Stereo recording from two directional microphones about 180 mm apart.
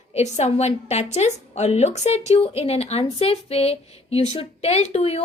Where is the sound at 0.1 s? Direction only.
40° left (ahead or behind).